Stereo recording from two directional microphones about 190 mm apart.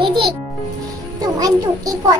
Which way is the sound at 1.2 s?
20° right (ahead or behind).